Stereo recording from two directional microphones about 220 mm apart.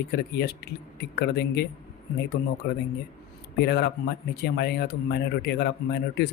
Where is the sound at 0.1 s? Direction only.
45° left (ahead or behind).